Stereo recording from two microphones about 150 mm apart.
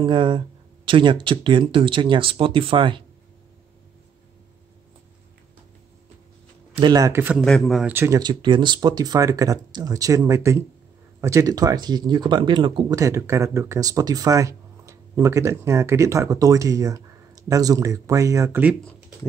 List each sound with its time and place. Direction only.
0.0 s speech: 35° right (ahead or behind)
6.9 s speech: 20° right (ahead or behind)
7.3 s speech: 5° left (ahead or behind)
7.9 s speech: 15° right (ahead or behind)
8.2 s speech: 30° right (ahead or behind); by 18.9 s 10° right (ahead or behind)